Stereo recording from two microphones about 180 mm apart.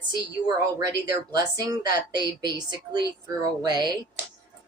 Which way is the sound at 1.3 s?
20° right (ahead or behind).